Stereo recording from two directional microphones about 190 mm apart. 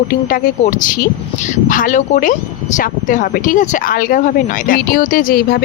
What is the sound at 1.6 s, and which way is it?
Speech, 45° left (ahead or behind).